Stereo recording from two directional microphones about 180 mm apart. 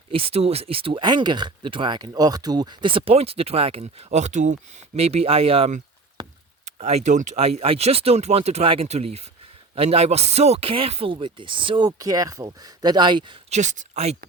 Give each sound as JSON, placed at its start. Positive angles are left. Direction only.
{"t": 0.1, "sound": "speech", "side_deg": -30}
{"t": 6.2, "sound": "chop", "side_deg": -25}
{"t": 6.7, "sound": "speech", "side_deg": -40}
{"t": 13.5, "sound": "speech", "side_deg": -40}